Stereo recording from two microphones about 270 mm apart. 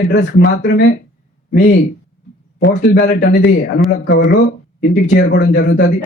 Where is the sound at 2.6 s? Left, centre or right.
Left.